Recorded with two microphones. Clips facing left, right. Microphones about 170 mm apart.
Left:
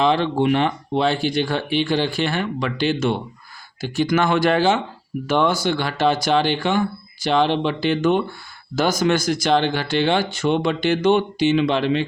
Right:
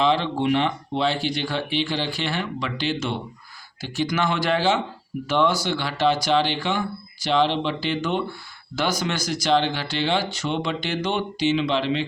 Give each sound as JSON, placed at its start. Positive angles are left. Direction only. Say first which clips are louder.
{"t": 0.0, "sound": "speech", "louder": "left 3 dB", "side_deg": 50}